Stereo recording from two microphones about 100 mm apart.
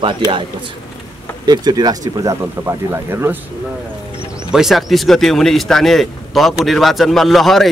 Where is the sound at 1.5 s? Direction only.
45° right (ahead or behind).